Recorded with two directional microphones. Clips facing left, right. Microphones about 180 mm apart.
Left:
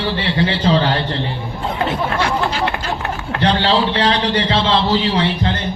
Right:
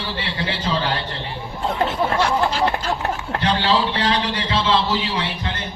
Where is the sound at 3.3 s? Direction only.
70° left (ahead or behind).